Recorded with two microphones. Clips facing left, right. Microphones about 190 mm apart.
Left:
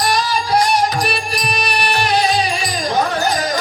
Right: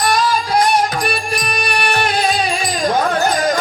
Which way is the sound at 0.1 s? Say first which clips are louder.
Right 1 dB; 50° right (ahead or behind).